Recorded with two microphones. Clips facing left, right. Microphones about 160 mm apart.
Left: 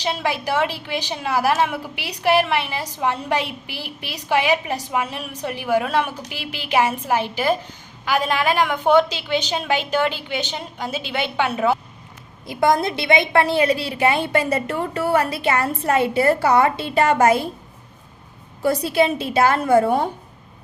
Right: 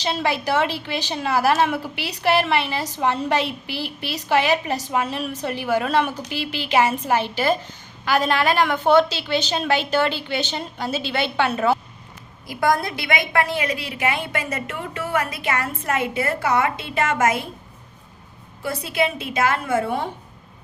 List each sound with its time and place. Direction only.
0.0 s a woman's voice: 10° left (ahead or behind)
12.5 s a woman's voice: 25° left (ahead or behind)
18.6 s a woman's voice: 35° left (ahead or behind)